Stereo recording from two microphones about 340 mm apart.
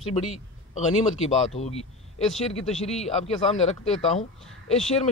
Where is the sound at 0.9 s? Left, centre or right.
Centre.